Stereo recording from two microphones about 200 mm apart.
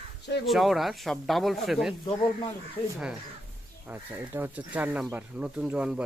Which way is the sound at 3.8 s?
10° right (ahead or behind).